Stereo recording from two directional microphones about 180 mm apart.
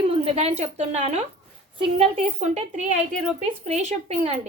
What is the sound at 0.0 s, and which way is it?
A woman's voice, 30° right (ahead or behind).